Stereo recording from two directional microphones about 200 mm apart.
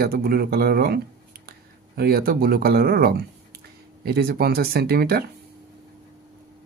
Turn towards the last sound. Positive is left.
turn(degrees=-50)  # may be behind; listen again after turning